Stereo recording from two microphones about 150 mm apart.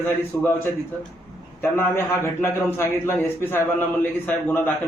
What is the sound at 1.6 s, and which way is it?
A man's voice, 15° left (ahead or behind).